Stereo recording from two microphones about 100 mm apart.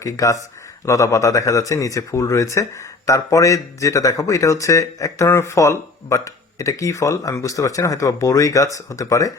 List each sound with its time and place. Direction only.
0.0 s speech: 35° left (ahead or behind)